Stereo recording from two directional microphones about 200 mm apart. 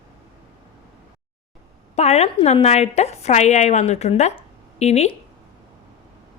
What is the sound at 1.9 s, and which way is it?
A woman's voice, 35° left (ahead or behind).